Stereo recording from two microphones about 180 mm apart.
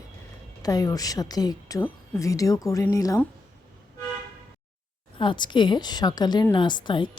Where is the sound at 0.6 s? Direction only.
20° left (ahead or behind).